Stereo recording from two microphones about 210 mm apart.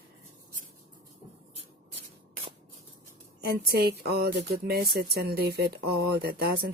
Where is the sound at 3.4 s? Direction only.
50° right (ahead or behind).